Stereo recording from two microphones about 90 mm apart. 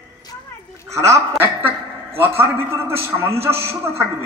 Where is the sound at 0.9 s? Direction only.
35° right (ahead or behind).